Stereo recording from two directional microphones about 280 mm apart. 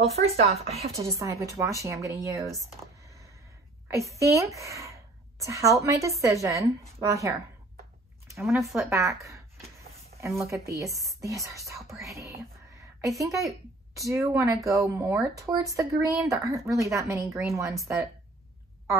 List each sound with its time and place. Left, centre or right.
0.0 s speech: right
1.2 s a woman's voice: centre
3.9 s a woman's voice: centre
8.4 s a woman's voice: centre